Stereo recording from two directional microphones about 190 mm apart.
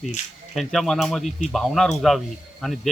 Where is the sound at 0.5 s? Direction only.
Centre (ahead or behind).